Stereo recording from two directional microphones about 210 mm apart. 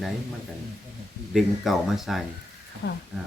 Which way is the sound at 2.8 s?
50° left (ahead or behind).